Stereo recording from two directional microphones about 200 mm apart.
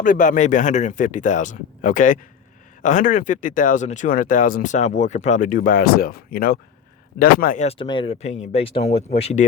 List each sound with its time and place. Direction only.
0.0 s speech: 40° left (ahead or behind)